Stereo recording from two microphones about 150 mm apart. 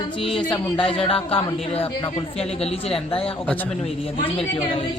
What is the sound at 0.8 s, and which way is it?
A woman's voice, 40° left (ahead or behind).